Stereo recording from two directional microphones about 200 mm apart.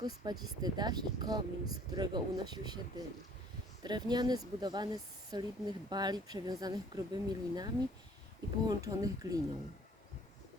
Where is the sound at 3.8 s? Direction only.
20° right (ahead or behind).